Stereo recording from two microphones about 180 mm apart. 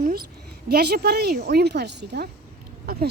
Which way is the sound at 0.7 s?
65° right (ahead or behind).